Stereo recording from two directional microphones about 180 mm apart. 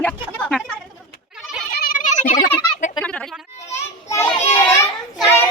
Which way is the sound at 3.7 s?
15° left (ahead or behind).